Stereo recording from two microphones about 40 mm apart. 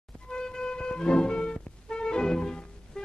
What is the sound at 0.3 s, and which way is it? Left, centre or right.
Music, centre.